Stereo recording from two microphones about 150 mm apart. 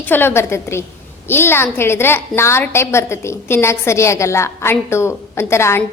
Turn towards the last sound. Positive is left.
turn(degrees=20)  # may be behind; listen again after turning